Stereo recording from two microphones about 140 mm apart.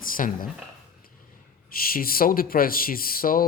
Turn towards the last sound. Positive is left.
turn(degrees=90)